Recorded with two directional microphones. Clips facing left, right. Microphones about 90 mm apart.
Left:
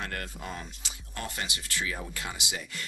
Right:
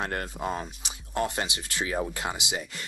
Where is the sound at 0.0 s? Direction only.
35° right (ahead or behind).